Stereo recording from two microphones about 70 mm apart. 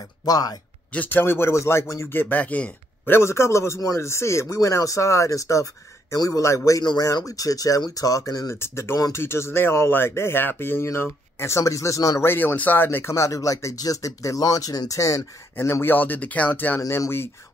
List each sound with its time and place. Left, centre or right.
0.2 s speech: left
0.9 s speech: left
2.1 s speech: left
3.1 s speech: left
4.6 s speech: left
6.8 s speech: left
7.2 s speech: left
8.5 s speech: left
12.2 s speech: left
13.1 s speech: left
15.5 s speech: left